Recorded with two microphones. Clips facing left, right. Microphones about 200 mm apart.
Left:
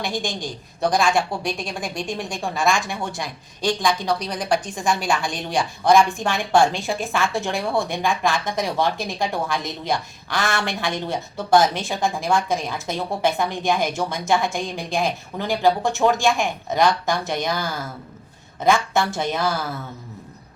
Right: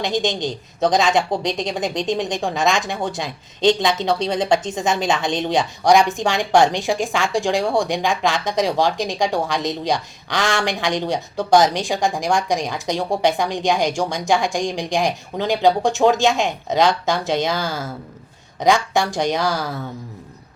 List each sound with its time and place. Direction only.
0.0 s a woman's voice: 20° right (ahead or behind)